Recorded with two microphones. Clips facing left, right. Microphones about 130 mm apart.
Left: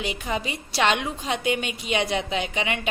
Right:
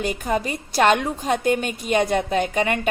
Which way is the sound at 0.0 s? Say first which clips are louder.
Right 5 dB; 45° right (ahead or behind).